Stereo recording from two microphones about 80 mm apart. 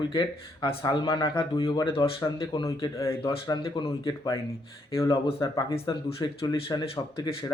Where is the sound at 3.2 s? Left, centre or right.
Left.